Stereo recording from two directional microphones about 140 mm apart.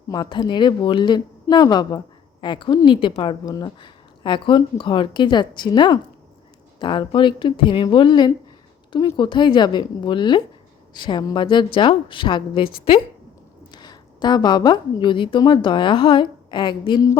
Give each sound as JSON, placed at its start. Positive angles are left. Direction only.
{"t": 0.1, "sound": "a woman's voice", "side_deg": 30}